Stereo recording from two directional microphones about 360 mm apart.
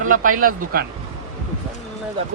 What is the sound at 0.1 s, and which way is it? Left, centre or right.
Speech, right.